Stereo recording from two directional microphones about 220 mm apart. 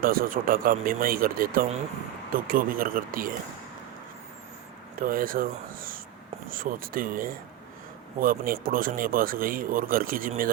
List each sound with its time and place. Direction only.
0.0 s speech: 40° right (ahead or behind)
4.9 s speech: 40° right (ahead or behind)